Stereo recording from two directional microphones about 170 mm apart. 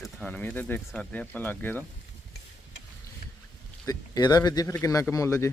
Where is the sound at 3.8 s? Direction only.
20° left (ahead or behind).